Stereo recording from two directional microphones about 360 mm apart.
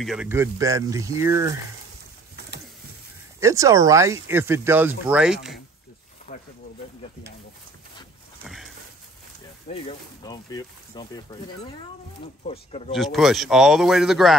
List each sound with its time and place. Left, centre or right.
0.0 s speech: centre
3.3 s speech: centre
6.3 s speech: left
8.5 s a sound: centre
9.7 s speech: centre
12.4 s speech: centre
12.9 s speech: centre